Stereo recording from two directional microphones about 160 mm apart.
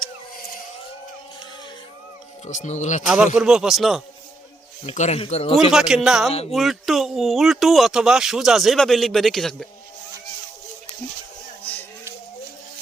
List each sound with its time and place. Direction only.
2.5 s speech: 50° left (ahead or behind)
3.3 s speech: 5° right (ahead or behind)
4.9 s speech: 45° left (ahead or behind)
5.7 s speech: 5° right (ahead or behind)
11.6 s a sound: 10° left (ahead or behind)